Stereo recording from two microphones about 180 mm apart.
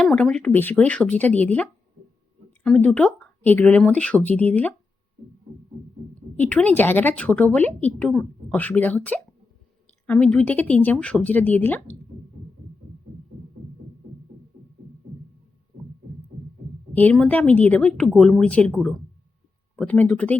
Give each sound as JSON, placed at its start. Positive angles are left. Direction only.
{"t": 0.0, "sound": "speech", "side_deg": 5}
{"t": 6.4, "sound": "speech", "side_deg": 10}
{"t": 16.9, "sound": "speech", "side_deg": 10}